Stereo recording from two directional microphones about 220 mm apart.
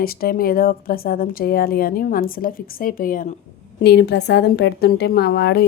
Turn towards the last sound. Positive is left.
turn(degrees=45)  # may be behind; listen again after turning